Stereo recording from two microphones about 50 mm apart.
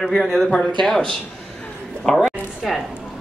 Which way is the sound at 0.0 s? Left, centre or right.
Centre.